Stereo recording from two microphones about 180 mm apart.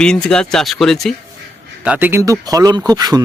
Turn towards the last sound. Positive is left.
turn(degrees=-20)  # may be behind; listen again after turning